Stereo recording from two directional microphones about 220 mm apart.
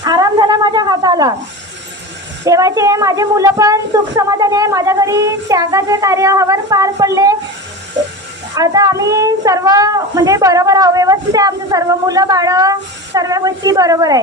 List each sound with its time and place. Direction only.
0.0 s a sound: 15° right (ahead or behind)
2.4 s a woman's voice: 15° right (ahead or behind)
8.5 s a woman's voice: 15° right (ahead or behind)